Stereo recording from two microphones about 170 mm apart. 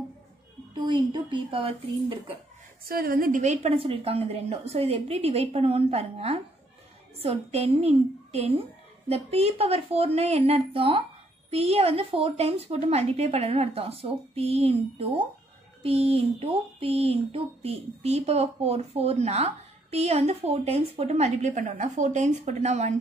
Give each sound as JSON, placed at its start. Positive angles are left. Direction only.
{"t": 0.7, "sound": "speech", "side_deg": -25}
{"t": 2.8, "sound": "speech", "side_deg": -60}